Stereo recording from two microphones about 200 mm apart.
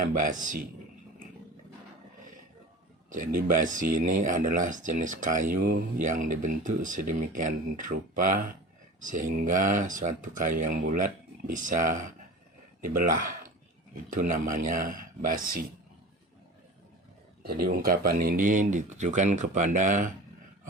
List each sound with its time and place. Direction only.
0.0 s speech: 40° right (ahead or behind)
3.1 s speech: 40° right (ahead or behind)
17.4 s speech: 50° right (ahead or behind)